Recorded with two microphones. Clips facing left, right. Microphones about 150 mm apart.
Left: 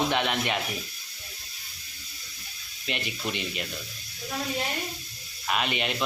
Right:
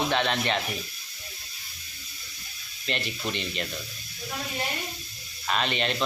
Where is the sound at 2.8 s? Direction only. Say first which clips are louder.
Right 1 dB; 10° left (ahead or behind).